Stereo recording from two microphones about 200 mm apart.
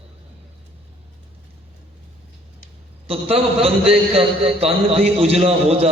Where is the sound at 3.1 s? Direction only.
30° right (ahead or behind).